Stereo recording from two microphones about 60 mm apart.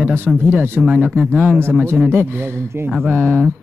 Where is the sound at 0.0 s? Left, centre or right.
Right.